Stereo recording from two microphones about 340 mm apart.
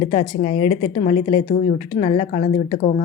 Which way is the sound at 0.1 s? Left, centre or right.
Left.